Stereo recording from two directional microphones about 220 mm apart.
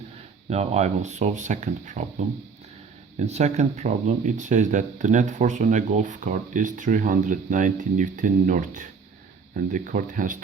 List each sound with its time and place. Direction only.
0.5 s speech: 30° right (ahead or behind)